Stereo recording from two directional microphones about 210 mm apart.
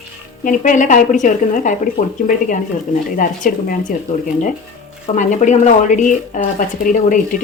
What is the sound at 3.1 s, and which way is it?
Speech, 40° left (ahead or behind).